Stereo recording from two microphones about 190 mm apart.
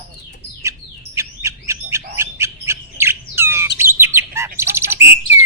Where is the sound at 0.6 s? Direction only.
15° right (ahead or behind).